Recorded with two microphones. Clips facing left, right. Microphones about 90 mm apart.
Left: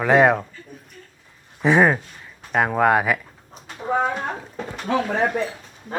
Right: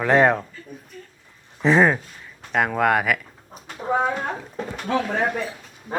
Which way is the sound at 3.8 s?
5° right (ahead or behind).